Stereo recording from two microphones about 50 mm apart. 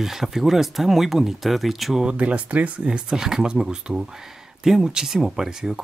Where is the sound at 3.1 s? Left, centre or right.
Centre.